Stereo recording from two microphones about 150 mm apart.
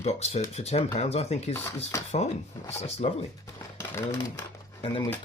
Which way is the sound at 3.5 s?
15° left (ahead or behind).